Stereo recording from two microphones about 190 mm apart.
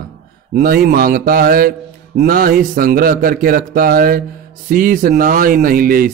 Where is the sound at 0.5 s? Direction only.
50° right (ahead or behind).